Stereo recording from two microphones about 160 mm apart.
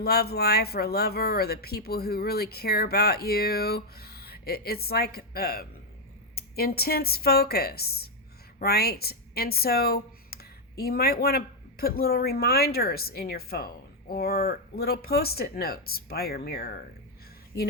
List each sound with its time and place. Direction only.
0.0 s speech: 75° left (ahead or behind)